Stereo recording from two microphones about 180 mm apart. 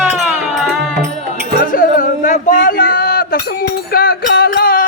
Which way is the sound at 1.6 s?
45° left (ahead or behind).